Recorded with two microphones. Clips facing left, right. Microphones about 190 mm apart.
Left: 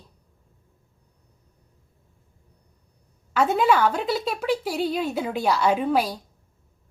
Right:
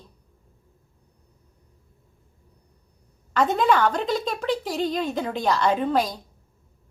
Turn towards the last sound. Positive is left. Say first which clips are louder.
# left 1 dB
turn(degrees=10)  # may be behind; listen again after turning